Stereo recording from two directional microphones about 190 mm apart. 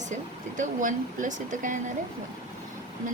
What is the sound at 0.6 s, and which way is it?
Speech, 45° right (ahead or behind).